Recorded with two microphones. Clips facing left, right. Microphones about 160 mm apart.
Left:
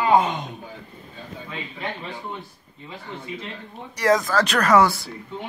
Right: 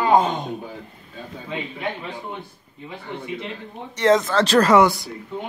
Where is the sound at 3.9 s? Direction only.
25° right (ahead or behind).